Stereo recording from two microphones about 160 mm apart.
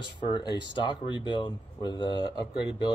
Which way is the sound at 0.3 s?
30° left (ahead or behind).